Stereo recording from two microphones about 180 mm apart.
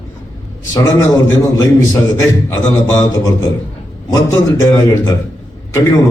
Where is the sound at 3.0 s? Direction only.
15° left (ahead or behind).